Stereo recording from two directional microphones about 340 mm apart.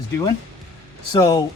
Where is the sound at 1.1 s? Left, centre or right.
Centre.